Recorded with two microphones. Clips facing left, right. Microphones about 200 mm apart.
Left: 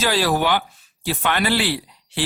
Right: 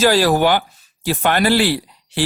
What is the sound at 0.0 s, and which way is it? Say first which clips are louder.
Speech: right 6 dB; 45° right (ahead or behind).